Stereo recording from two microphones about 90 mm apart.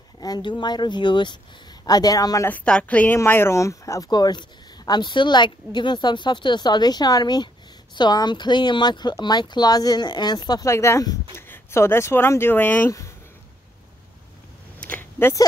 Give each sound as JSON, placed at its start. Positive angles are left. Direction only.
{"t": 0.2, "sound": "a woman's voice", "side_deg": 50}
{"t": 1.9, "sound": "speech", "side_deg": 45}
{"t": 2.6, "sound": "a woman's voice", "side_deg": 10}
{"t": 3.3, "sound": "speech", "side_deg": 30}
{"t": 4.1, "sound": "a woman's voice", "side_deg": 50}
{"t": 10.6, "sound": "speech", "side_deg": 30}
{"t": 14.8, "sound": "a sound", "side_deg": 20}